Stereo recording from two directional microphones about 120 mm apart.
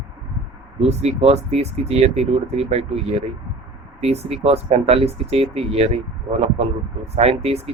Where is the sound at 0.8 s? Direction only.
60° right (ahead or behind).